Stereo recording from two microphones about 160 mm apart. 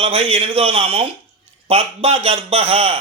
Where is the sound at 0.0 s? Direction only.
40° right (ahead or behind).